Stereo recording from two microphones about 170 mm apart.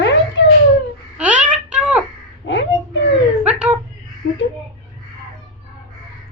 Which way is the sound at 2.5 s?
90° left.